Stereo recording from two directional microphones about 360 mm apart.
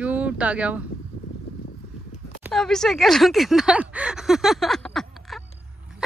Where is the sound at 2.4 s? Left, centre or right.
Centre.